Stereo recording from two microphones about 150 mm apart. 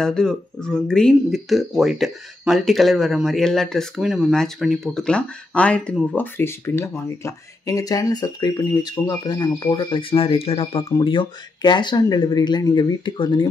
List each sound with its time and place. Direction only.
0.0 s speech: 5° left (ahead or behind); by 13.5 s 30° left (ahead or behind)